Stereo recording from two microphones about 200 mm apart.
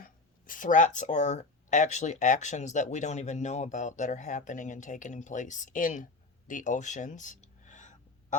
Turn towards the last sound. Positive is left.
turn(degrees=35)  # may be behind; listen again after turning